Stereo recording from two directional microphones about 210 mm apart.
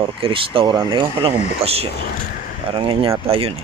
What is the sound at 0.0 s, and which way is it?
Speech, 25° right (ahead or behind).